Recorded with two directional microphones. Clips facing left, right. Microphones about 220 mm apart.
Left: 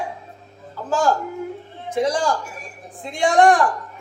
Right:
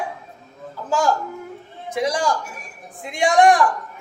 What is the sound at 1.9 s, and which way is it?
A man's voice, 10° right (ahead or behind).